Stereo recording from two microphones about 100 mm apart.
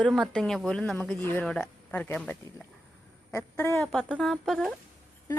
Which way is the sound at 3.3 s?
30° left (ahead or behind).